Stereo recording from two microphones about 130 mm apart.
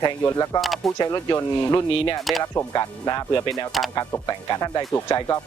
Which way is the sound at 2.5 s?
25° left (ahead or behind).